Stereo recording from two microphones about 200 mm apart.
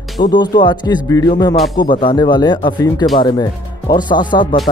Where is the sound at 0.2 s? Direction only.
20° left (ahead or behind).